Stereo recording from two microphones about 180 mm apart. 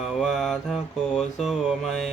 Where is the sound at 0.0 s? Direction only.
Centre (ahead or behind).